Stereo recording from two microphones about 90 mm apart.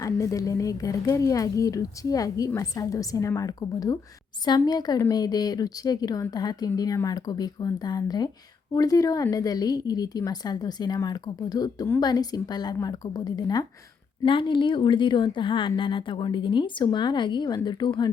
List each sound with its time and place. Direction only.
0.0 s a woman's voice: 40° left (ahead or behind)
14.3 s speech: 70° left (ahead or behind)